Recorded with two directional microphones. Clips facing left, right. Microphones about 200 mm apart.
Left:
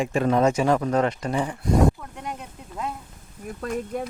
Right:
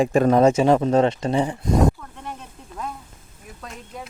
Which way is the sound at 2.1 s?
15° left (ahead or behind).